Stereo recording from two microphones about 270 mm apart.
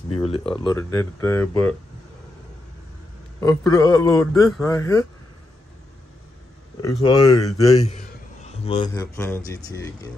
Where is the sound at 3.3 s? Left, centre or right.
Centre.